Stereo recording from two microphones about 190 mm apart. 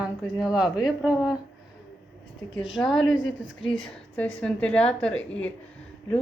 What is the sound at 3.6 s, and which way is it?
Speech, centre (ahead or behind).